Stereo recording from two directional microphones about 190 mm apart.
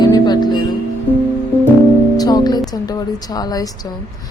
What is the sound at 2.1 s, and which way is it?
Music, 20° left (ahead or behind).